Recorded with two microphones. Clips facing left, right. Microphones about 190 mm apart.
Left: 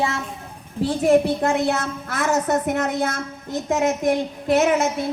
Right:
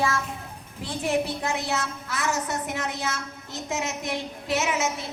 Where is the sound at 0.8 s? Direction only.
50° left (ahead or behind).